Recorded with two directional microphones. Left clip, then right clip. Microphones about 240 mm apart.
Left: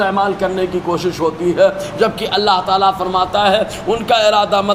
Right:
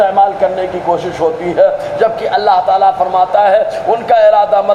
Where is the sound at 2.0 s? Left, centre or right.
Left.